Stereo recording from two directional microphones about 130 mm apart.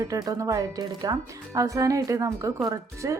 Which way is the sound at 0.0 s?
25° right (ahead or behind).